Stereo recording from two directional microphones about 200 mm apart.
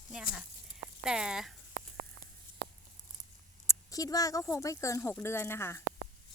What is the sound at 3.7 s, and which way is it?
Speech, 15° left (ahead or behind).